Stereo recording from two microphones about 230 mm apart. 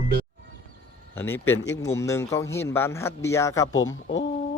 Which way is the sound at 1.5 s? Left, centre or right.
Left.